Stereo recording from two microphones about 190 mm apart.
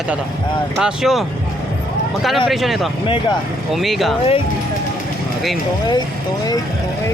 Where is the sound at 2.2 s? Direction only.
Centre (ahead or behind).